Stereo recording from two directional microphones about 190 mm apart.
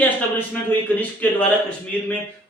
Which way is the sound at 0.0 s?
10° left (ahead or behind).